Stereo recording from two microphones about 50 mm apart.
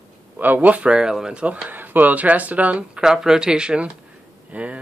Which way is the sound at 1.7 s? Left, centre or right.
Right.